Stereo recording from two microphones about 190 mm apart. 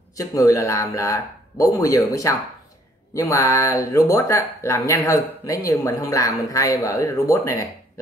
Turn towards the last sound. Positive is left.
turn(degrees=15)  # may be behind; listen again after turning